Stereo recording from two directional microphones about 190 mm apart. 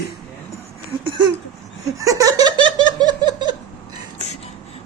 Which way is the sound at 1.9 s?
15° right (ahead or behind).